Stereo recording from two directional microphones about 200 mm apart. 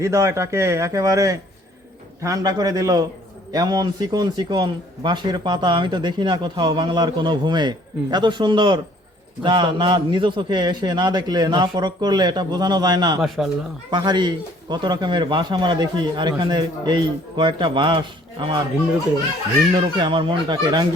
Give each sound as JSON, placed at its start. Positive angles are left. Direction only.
{"t": 0.0, "sound": "a man's voice", "side_deg": -15}
{"t": 13.2, "sound": "speech", "side_deg": 0}
{"t": 13.9, "sound": "a man's voice", "side_deg": -20}
{"t": 19.7, "sound": "a man's voice", "side_deg": -25}